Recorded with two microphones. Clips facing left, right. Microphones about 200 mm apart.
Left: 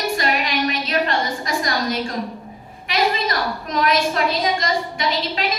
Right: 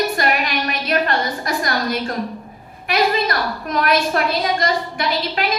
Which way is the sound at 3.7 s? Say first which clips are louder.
Right 1 dB; 60° right (ahead or behind).